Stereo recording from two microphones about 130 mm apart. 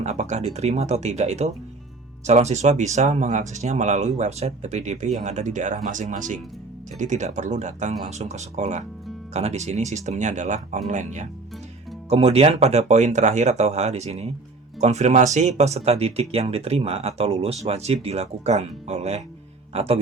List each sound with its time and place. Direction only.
0.0 s speech: 60° right (ahead or behind); by 6.4 s 75° right (ahead or behind)
7.0 s speech: 65° right (ahead or behind)
12.0 s speech: 50° right (ahead or behind)